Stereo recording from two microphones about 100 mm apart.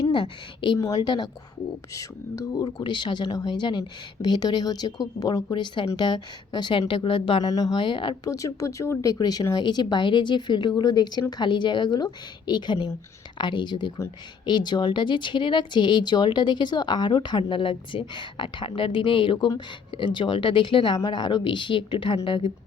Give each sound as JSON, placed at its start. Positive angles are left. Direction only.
{"t": 0.0, "sound": "a woman's voice", "side_deg": 50}
{"t": 0.8, "sound": "speech", "side_deg": 35}
{"t": 1.9, "sound": "a woman's voice", "side_deg": 35}
{"t": 7.4, "sound": "speech", "side_deg": 45}
{"t": 8.2, "sound": "speech", "side_deg": 35}
{"t": 9.6, "sound": "a woman's voice", "side_deg": 50}